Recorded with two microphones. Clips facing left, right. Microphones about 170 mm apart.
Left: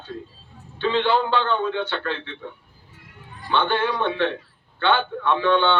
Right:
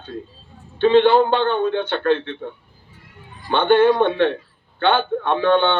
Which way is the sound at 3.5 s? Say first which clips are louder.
Right 8 dB; 55° right (ahead or behind).